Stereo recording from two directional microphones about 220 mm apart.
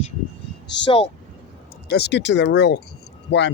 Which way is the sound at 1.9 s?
50° left (ahead or behind).